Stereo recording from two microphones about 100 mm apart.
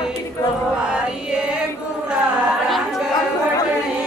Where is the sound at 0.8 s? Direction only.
10° right (ahead or behind).